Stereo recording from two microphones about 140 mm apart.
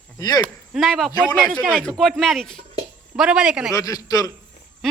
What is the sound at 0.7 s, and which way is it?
A man's voice, centre (ahead or behind).